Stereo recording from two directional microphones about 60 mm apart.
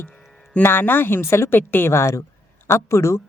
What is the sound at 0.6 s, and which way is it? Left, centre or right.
Speech, left.